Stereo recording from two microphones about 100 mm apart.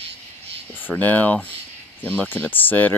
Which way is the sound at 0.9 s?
15° left (ahead or behind).